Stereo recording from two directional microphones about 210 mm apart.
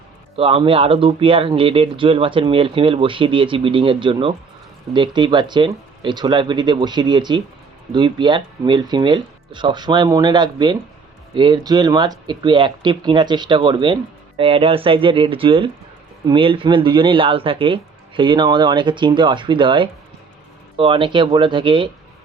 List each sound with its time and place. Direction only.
0.3 s speech: 25° right (ahead or behind)